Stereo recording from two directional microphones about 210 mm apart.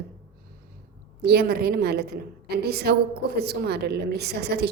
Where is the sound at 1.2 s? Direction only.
50° right (ahead or behind).